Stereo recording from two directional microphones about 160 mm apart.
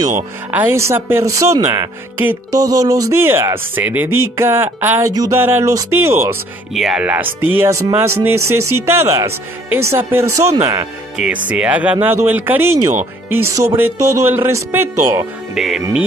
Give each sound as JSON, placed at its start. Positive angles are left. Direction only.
{"t": 0.5, "sound": "speech", "side_deg": -15}
{"t": 6.7, "sound": "speech", "side_deg": -5}
{"t": 11.1, "sound": "speech", "side_deg": -10}
{"t": 15.5, "sound": "music", "side_deg": 0}